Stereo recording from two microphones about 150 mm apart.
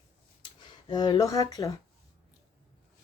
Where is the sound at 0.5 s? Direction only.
30° left (ahead or behind).